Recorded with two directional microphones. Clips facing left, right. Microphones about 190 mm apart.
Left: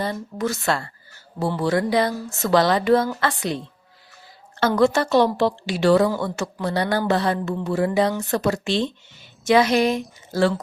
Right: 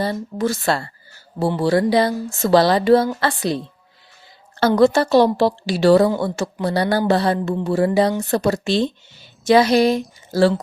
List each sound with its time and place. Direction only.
0.0 s speech: 30° right (ahead or behind)
4.8 s speech: 35° right (ahead or behind)